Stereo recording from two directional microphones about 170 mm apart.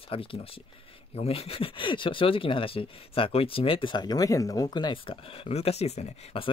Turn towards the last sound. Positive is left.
turn(degrees=35)  # may be behind; listen again after turning